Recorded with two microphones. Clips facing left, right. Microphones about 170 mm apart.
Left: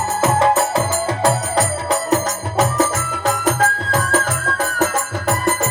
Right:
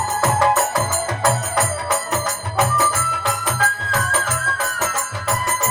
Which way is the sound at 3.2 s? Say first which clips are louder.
Left 7 dB; 45° left (ahead or behind).